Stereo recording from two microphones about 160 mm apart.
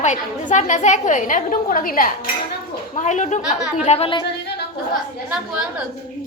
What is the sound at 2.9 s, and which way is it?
Speech, 50° left (ahead or behind).